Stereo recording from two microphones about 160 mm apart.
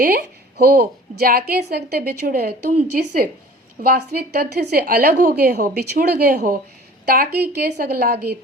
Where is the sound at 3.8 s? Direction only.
70° right (ahead or behind).